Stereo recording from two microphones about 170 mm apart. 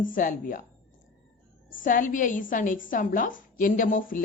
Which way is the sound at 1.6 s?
50° left (ahead or behind).